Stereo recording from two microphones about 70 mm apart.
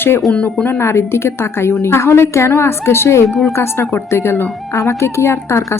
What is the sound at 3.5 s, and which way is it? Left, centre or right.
Speech, left.